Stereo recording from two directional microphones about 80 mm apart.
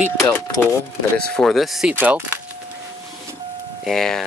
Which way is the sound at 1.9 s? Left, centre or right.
Centre.